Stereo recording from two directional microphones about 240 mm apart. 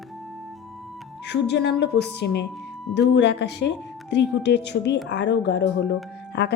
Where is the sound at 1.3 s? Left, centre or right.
Left.